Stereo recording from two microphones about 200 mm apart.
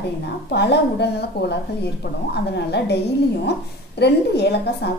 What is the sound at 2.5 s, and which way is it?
Speech, 55° left (ahead or behind).